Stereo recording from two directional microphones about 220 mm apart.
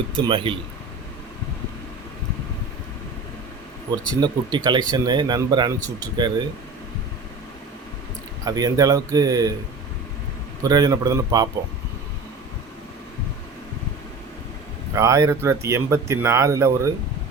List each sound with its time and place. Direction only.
0.1 s speech: 20° right (ahead or behind)
4.2 s speech: 20° right (ahead or behind)
8.4 s speech: 15° right (ahead or behind)
10.6 s speech: 15° right (ahead or behind)
14.9 s speech: 15° right (ahead or behind)